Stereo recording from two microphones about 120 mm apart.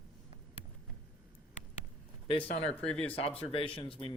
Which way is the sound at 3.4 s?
50° left (ahead or behind).